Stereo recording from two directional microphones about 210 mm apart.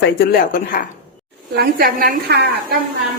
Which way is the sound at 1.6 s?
45° right (ahead or behind).